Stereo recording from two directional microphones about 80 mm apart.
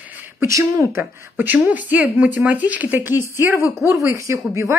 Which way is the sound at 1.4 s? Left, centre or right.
Right.